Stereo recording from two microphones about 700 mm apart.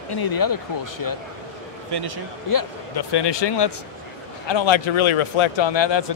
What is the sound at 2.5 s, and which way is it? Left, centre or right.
Speech, left.